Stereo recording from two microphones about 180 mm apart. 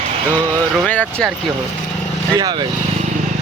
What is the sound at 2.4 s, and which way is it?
Speech, 20° right (ahead or behind).